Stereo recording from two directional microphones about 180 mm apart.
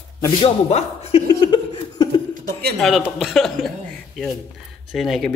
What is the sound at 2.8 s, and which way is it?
Speech, centre (ahead or behind).